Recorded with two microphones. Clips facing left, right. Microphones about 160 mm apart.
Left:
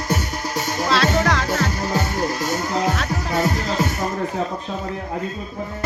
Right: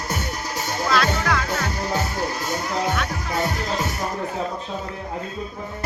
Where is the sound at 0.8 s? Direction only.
25° left (ahead or behind).